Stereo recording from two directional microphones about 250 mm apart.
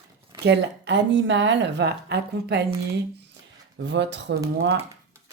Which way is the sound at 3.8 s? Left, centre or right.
Right.